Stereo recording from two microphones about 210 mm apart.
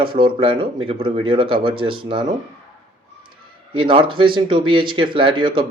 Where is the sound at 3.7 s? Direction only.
25° right (ahead or behind).